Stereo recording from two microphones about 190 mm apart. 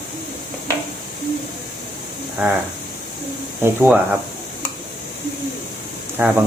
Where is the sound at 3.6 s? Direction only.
10° right (ahead or behind).